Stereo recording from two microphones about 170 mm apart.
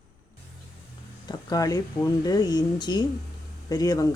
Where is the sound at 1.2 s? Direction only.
20° left (ahead or behind).